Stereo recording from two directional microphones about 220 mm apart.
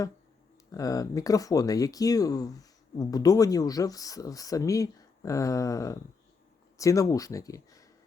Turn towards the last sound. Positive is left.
turn(degrees=15)  # may be behind; listen again after turning